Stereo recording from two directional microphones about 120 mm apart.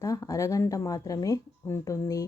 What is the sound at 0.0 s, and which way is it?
A woman's voice, 30° left (ahead or behind).